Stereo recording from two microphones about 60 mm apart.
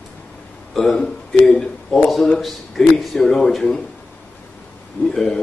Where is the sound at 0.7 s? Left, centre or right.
Centre.